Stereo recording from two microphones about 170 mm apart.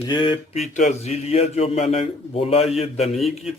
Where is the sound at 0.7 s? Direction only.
45° left (ahead or behind).